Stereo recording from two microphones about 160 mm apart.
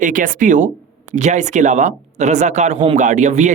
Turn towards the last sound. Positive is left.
turn(degrees=-45)  # may be behind; listen again after turning